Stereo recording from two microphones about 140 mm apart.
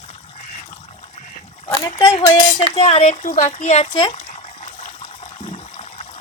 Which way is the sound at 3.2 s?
60° left (ahead or behind).